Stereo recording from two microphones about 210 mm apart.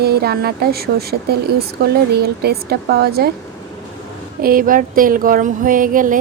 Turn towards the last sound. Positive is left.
turn(degrees=-40)  # may be behind; listen again after turning